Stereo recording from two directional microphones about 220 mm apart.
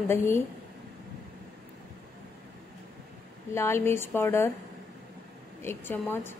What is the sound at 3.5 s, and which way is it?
Speech, 10° left (ahead or behind).